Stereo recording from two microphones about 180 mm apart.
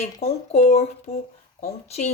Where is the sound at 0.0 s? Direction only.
35° left (ahead or behind).